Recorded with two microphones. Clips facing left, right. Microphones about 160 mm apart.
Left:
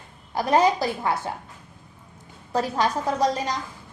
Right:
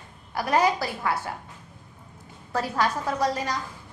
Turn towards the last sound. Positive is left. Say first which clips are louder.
# left 3 dB
turn(degrees=20)  # may be behind; listen again after turning